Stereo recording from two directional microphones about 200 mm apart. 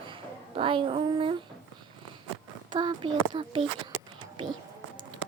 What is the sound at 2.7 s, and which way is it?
Speech, 25° right (ahead or behind).